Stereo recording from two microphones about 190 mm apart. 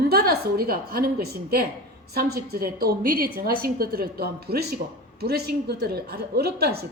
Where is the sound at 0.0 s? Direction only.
55° right (ahead or behind).